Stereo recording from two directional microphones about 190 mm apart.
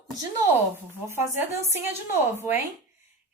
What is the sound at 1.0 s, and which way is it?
Speech, 15° right (ahead or behind).